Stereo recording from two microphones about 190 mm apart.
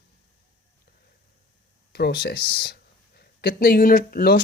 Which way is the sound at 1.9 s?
60° left (ahead or behind).